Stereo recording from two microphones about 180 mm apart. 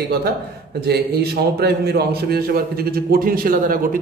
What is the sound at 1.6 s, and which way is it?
A man's voice, 60° right (ahead or behind).